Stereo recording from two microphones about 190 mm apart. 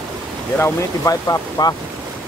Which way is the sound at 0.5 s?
15° left (ahead or behind).